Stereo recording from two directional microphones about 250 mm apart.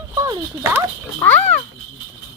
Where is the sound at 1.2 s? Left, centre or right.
Centre.